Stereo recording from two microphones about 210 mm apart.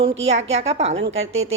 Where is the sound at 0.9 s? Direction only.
65° right (ahead or behind).